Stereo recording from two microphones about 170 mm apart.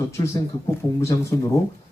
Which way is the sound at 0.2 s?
20° left (ahead or behind).